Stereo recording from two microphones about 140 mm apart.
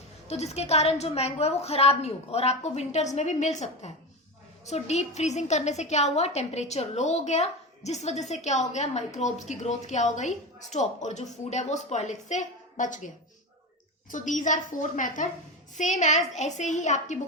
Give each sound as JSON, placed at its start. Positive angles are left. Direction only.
{"t": 0.3, "sound": "a woman's voice", "side_deg": 50}
{"t": 14.1, "sound": "a woman's voice", "side_deg": 65}